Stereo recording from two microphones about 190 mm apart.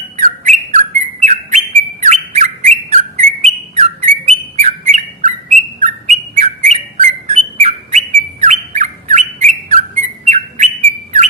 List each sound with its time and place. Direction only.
0.2 s bird: 40° right (ahead or behind)